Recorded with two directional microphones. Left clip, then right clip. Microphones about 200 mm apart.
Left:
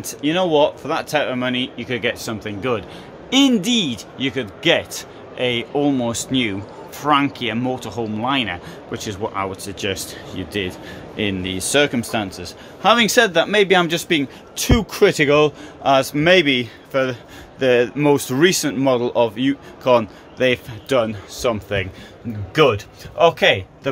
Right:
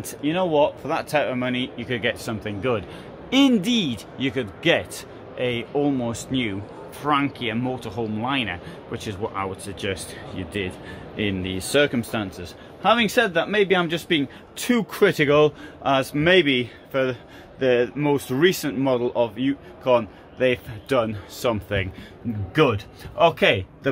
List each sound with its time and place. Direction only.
0.2 s a man's voice: 10° left (ahead or behind)
5.4 s a man's voice: 15° left (ahead or behind)
14.6 s a man's voice: centre (ahead or behind)